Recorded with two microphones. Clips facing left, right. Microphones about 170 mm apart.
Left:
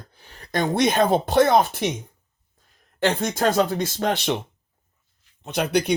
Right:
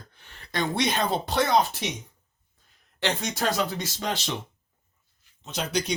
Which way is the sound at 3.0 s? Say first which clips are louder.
Left 6 dB; 50° left (ahead or behind).